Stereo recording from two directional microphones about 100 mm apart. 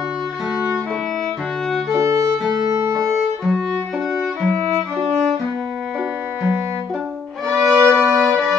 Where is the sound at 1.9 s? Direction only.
35° right (ahead or behind).